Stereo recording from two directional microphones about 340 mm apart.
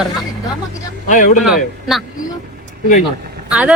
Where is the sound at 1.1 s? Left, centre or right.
Left.